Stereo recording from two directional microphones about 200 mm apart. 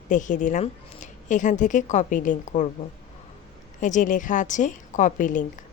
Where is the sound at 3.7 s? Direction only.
40° left (ahead or behind).